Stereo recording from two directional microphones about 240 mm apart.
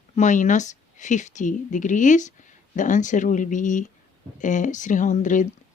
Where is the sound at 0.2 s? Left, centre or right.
Left.